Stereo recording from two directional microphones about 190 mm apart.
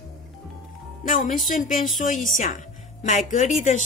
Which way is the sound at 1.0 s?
45° left (ahead or behind).